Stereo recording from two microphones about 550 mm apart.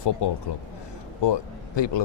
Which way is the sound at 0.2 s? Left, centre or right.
Left.